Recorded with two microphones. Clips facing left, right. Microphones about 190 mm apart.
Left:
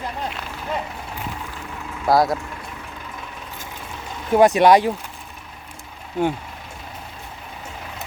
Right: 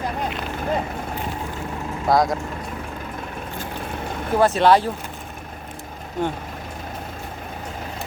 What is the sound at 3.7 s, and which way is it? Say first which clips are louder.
Vehicle: right 6 dB; 55° right (ahead or behind).